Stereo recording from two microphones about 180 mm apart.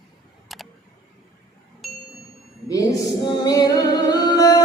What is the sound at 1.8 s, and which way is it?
Ding, centre (ahead or behind).